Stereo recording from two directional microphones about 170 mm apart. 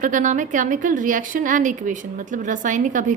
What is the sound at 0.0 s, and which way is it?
A woman's voice, 50° right (ahead or behind).